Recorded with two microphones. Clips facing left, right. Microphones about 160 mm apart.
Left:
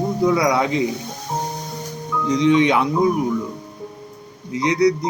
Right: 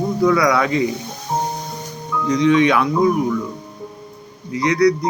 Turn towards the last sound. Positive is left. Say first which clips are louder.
# right 2 dB
turn(degrees=25)  # may be behind; listen again after turning